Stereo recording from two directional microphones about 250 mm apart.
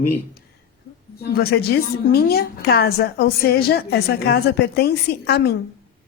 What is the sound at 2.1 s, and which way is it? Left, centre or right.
A woman's voice, left.